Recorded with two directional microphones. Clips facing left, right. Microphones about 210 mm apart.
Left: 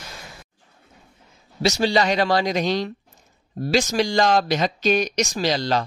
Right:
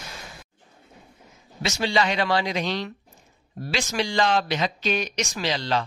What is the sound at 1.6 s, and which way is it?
Speech, 35° left (ahead or behind).